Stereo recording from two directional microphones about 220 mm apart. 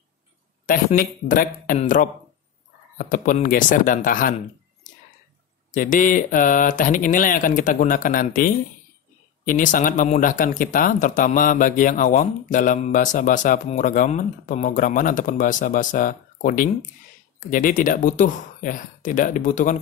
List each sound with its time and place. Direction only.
0.7 s speech: 40° left (ahead or behind)
5.7 s speech: 35° left (ahead or behind)